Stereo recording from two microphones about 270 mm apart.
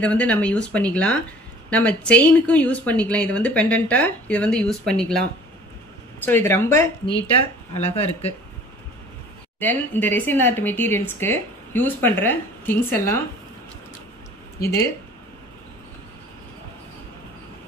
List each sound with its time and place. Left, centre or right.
0.0 s speech: centre
6.2 s speech: centre
7.1 s speech: left
9.6 s speech: centre